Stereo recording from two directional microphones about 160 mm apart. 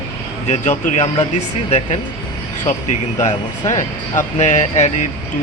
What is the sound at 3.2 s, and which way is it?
Speech, 45° left (ahead or behind).